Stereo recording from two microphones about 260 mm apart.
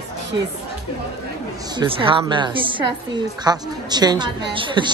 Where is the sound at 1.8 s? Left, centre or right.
Centre.